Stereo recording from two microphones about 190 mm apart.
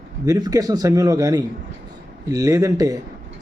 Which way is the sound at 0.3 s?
20° right (ahead or behind).